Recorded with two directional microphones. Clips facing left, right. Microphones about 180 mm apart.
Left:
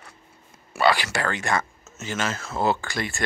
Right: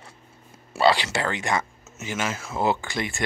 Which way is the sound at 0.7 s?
25° right (ahead or behind).